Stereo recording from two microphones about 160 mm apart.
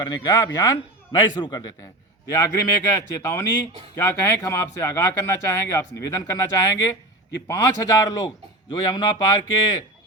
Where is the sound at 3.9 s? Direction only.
15° left (ahead or behind).